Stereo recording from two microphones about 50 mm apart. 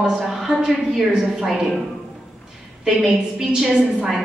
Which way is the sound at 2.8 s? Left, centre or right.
Centre.